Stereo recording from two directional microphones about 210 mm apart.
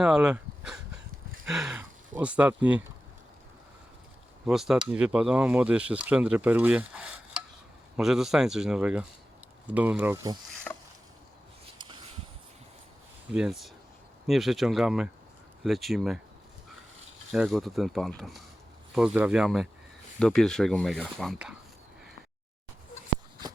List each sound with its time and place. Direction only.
0.0 s speech: 5° right (ahead or behind)
4.4 s speech: centre (ahead or behind)
10.5 s a sound: 5° left (ahead or behind)
11.8 s a sound: 20° right (ahead or behind)
13.3 s speech: 5° right (ahead or behind)
17.3 s speech: centre (ahead or behind)